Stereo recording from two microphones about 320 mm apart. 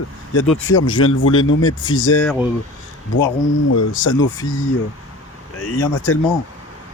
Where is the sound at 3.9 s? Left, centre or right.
Left.